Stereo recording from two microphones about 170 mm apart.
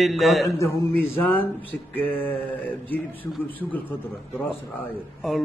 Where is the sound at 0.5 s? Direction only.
15° left (ahead or behind).